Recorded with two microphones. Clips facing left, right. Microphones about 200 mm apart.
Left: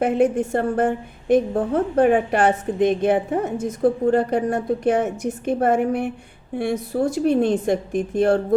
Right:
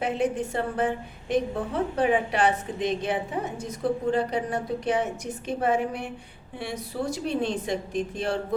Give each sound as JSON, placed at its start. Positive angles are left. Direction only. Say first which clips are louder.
{"t": 0.0, "sound": "a woman's voice", "louder": "left 8 dB", "side_deg": 50}